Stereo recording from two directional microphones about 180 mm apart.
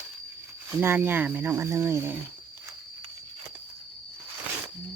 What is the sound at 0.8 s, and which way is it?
Speech, 10° right (ahead or behind).